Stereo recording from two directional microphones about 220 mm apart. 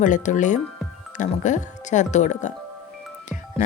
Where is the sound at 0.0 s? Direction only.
35° left (ahead or behind).